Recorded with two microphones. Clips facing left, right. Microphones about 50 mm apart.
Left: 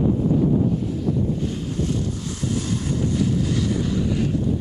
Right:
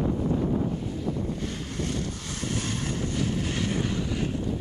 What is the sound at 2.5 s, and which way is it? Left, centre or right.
Vehicle, right.